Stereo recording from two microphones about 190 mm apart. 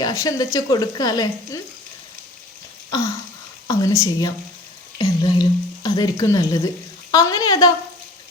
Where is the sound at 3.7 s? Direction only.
20° left (ahead or behind).